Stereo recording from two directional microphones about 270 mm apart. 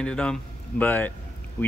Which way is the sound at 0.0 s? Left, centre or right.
Centre.